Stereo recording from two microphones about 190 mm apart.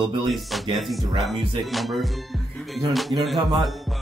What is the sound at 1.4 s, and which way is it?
Speech, 25° right (ahead or behind).